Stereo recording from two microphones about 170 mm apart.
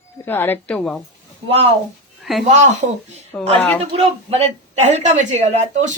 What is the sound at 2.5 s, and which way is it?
Speech, 45° right (ahead or behind).